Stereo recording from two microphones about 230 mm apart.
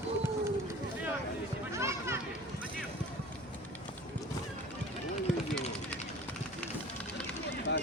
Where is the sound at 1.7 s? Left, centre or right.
Centre.